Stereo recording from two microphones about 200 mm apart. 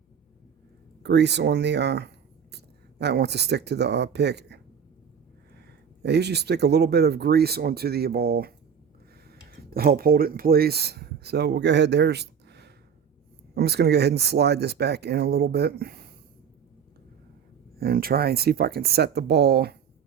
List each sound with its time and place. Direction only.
1.0 s speech: 60° right (ahead or behind)
17.7 s speech: 50° right (ahead or behind)